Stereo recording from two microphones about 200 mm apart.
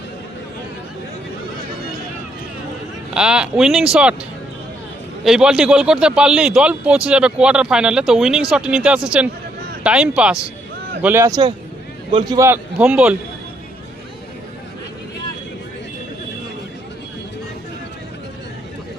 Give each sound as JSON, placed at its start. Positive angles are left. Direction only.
{"t": 3.2, "sound": "a man's voice", "side_deg": -5}
{"t": 5.2, "sound": "a man's voice", "side_deg": -5}